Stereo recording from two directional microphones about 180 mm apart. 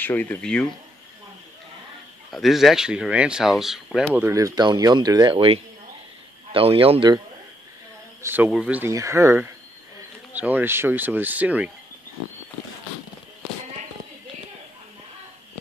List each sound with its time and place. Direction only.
0.0 s speech: 10° left (ahead or behind)
2.3 s speech: centre (ahead or behind)
4.2 s speech: 15° right (ahead or behind)
8.2 s speech: 10° right (ahead or behind)